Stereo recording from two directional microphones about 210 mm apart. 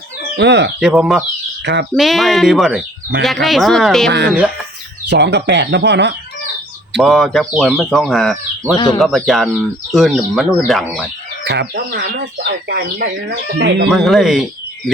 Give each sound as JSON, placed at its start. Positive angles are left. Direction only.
{"t": 0.3, "sound": "speech", "side_deg": -55}
{"t": 0.8, "sound": "speech", "side_deg": 0}
{"t": 1.6, "sound": "speech", "side_deg": -55}
{"t": 2.0, "sound": "speech", "side_deg": 0}
{"t": 5.0, "sound": "speech", "side_deg": -55}
{"t": 6.9, "sound": "speech", "side_deg": 0}
{"t": 8.7, "sound": "speech", "side_deg": 15}
{"t": 9.0, "sound": "speech", "side_deg": 0}
{"t": 11.4, "sound": "speech", "side_deg": -55}
{"t": 13.9, "sound": "speech", "side_deg": 0}